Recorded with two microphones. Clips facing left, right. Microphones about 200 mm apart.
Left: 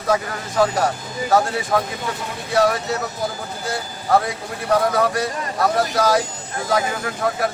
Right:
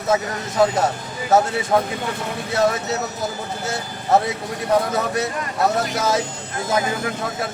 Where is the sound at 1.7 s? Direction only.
20° right (ahead or behind).